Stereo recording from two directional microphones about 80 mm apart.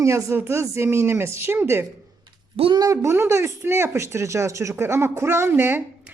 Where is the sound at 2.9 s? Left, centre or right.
Right.